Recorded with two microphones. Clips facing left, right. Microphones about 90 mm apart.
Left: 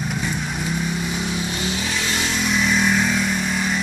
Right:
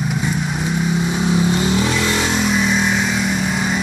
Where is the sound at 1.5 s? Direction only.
50° right (ahead or behind).